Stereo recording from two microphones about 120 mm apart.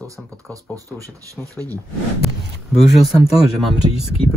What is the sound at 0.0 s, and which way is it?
Speech, 25° right (ahead or behind).